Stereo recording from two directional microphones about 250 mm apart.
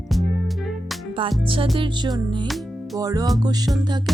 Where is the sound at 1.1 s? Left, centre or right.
Centre.